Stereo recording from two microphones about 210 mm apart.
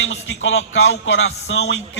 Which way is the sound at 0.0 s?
65° left (ahead or behind).